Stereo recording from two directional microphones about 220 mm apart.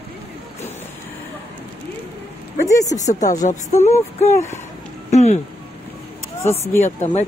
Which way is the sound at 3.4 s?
30° left (ahead or behind).